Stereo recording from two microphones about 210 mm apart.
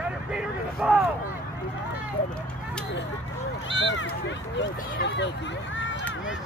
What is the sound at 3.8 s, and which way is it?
Speech, 60° left (ahead or behind).